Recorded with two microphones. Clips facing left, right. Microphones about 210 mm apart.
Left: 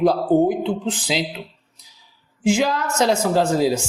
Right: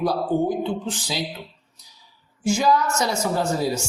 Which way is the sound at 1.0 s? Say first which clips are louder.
Left 5 dB; 90° left.